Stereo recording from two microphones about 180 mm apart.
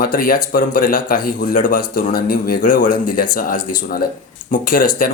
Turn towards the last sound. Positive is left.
turn(degrees=50)  # may be behind; listen again after turning